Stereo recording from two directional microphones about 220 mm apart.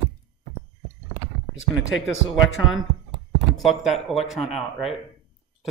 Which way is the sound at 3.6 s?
Centre (ahead or behind).